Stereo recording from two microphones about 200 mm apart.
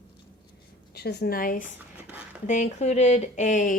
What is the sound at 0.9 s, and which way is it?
Speech, 55° left (ahead or behind).